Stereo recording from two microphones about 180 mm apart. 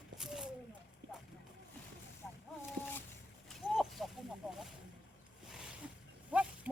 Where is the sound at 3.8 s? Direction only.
Centre (ahead or behind).